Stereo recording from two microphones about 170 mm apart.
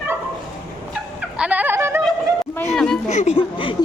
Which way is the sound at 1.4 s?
10° right (ahead or behind).